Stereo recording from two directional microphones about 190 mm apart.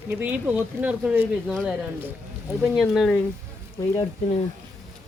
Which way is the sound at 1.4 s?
5° left (ahead or behind).